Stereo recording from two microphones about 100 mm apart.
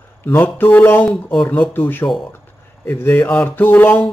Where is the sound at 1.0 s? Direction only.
Centre (ahead or behind).